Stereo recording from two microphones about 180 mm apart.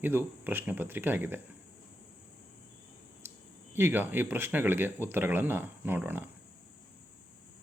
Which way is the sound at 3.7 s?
10° right (ahead or behind).